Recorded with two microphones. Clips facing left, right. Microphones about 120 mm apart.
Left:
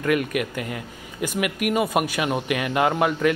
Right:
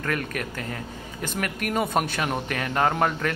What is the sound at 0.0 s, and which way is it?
Speech, 15° left (ahead or behind).